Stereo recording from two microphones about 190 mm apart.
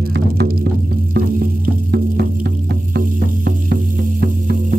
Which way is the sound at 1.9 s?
60° right (ahead or behind).